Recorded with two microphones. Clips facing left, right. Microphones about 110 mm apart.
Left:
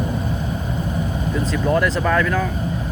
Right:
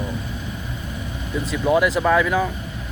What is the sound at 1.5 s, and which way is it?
Speech, 10° right (ahead or behind).